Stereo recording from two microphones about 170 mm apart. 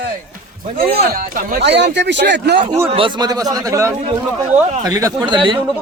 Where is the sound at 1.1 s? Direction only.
55° right (ahead or behind).